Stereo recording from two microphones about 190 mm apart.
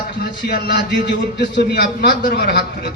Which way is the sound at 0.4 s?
60° left (ahead or behind).